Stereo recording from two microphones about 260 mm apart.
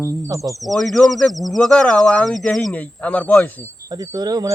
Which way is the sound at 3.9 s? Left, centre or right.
Centre.